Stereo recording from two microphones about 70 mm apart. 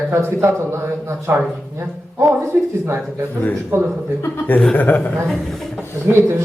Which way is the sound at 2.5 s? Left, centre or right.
Right.